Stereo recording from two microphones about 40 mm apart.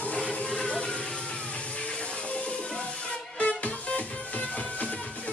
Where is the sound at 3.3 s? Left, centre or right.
Left.